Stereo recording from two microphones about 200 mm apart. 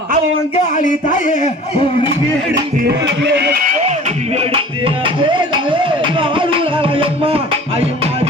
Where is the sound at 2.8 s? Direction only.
60° right (ahead or behind).